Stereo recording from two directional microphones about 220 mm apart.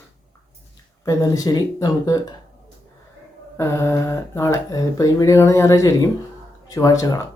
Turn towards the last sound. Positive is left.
turn(degrees=15)  # may be behind; listen again after turning